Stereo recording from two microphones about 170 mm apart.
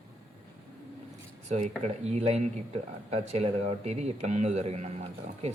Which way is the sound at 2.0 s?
40° right (ahead or behind).